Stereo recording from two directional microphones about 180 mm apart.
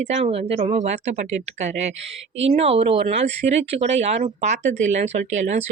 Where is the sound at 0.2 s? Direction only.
35° right (ahead or behind).